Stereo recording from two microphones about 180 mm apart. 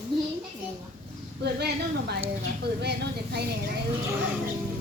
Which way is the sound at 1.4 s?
65° right (ahead or behind).